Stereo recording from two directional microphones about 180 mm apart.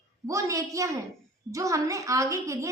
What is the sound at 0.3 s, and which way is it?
A woman's voice, 15° right (ahead or behind).